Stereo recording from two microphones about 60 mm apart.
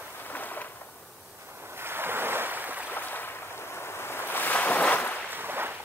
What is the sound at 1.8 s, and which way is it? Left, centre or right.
Waves, right.